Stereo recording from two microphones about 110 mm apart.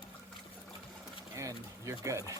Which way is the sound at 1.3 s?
30° right (ahead or behind).